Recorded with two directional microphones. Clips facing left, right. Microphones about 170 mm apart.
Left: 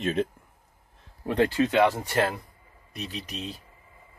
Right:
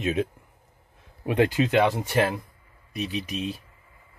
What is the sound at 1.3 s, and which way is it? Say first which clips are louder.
Speech: right 1 dB; 15° right (ahead or behind).